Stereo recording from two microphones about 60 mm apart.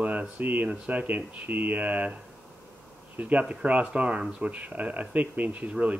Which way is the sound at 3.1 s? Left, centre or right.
Right.